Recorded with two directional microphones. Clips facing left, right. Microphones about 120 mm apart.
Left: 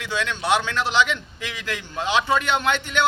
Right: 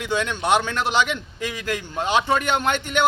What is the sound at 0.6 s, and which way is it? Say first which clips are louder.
A man's voice: even; 45° right (ahead or behind).